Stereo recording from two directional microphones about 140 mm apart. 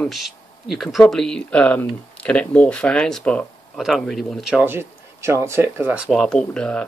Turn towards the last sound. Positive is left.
turn(degrees=5)  # may be behind; listen again after turning